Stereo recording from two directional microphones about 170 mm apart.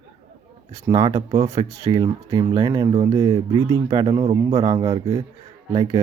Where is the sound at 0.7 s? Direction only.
20° right (ahead or behind).